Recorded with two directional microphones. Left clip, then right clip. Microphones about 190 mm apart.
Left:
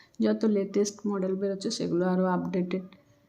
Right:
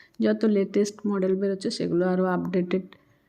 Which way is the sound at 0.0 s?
10° right (ahead or behind).